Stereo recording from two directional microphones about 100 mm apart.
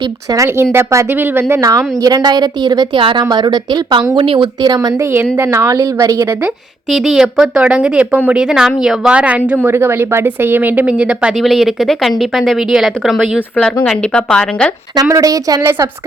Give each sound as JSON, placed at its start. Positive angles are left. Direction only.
{"t": 0.0, "sound": "speech", "side_deg": -35}
{"t": 1.6, "sound": "a woman's voice", "side_deg": -35}
{"t": 3.0, "sound": "speech", "side_deg": -55}
{"t": 3.2, "sound": "a woman's voice", "side_deg": -45}
{"t": 4.6, "sound": "speech", "side_deg": -40}
{"t": 4.9, "sound": "speech", "side_deg": -25}
{"t": 6.9, "sound": "speech", "side_deg": -5}
{"t": 9.6, "sound": "speech", "side_deg": -25}
{"t": 13.6, "sound": "speech", "side_deg": 10}
{"t": 15.1, "sound": "speech", "side_deg": -35}